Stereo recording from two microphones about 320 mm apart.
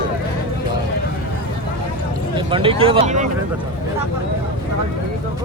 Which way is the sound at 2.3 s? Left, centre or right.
Centre.